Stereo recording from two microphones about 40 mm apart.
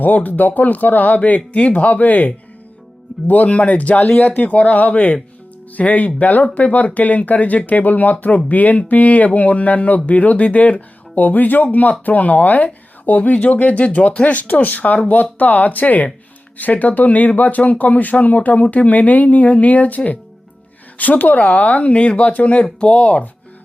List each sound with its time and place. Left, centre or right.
0.0 s speech: left
21.0 s speech: left